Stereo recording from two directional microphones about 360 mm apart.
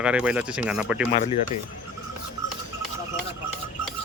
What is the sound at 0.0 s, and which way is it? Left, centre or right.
Speech, centre.